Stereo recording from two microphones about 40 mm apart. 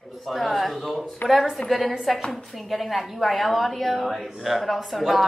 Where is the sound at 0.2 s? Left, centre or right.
Centre.